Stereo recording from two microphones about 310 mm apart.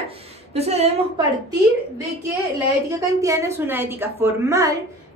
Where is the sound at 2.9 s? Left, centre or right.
Centre.